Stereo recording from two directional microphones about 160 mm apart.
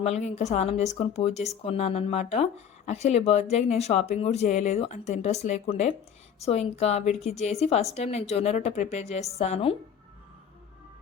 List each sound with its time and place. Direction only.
0.0 s a woman's voice: 45° left (ahead or behind)